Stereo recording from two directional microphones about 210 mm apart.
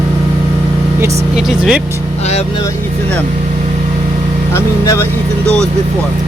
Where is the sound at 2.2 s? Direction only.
30° left (ahead or behind).